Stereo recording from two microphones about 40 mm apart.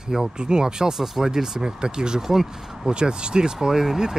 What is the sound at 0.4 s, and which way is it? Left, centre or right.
Speech, centre.